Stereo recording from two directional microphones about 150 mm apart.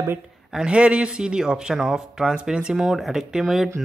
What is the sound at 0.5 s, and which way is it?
Speech, 5° right (ahead or behind).